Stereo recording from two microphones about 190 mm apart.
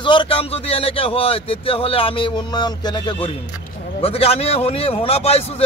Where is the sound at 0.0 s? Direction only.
25° left (ahead or behind).